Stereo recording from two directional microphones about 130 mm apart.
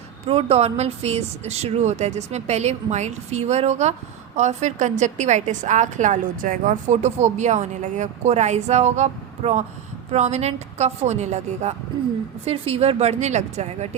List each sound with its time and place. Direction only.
0.3 s a woman's voice: 50° right (ahead or behind)